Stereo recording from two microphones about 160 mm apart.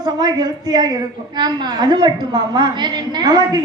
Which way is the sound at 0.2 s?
25° right (ahead or behind).